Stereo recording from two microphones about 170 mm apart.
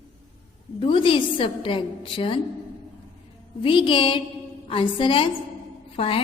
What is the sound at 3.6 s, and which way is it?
A woman's voice, 30° left (ahead or behind).